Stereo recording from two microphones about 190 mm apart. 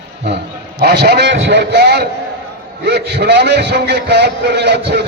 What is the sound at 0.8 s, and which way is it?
A man's voice, 60° right (ahead or behind).